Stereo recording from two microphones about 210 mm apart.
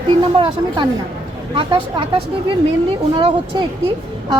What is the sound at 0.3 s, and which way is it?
Speech, 25° right (ahead or behind).